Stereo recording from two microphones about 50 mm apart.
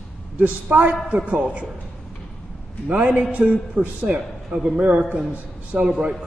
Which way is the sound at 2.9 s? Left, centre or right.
Right.